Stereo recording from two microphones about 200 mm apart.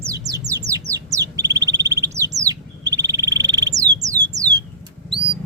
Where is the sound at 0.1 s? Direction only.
15° right (ahead or behind).